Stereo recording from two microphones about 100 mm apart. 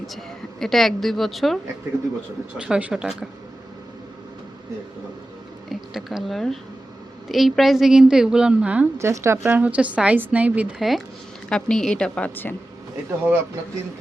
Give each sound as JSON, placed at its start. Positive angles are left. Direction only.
{"t": 0.6, "sound": "a woman's voice", "side_deg": 5}
{"t": 2.6, "sound": "a woman's voice", "side_deg": -10}
{"t": 5.6, "sound": "a woman's voice", "side_deg": 0}
{"t": 9.0, "sound": "a woman's voice", "side_deg": -25}
{"t": 10.8, "sound": "a woman's voice", "side_deg": 0}
{"t": 13.1, "sound": "speech", "side_deg": -20}